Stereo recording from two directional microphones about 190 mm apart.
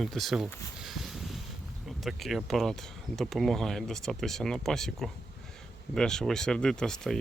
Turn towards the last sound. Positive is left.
turn(degrees=5)  # may be behind; listen again after turning